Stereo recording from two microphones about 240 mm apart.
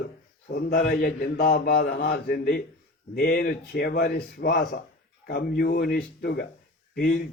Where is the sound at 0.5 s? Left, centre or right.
Left.